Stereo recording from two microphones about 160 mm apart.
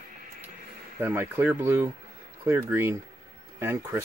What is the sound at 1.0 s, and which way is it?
Speech, 15° right (ahead or behind).